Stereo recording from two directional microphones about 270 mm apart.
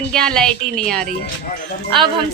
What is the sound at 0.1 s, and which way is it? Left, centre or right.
Speech, centre.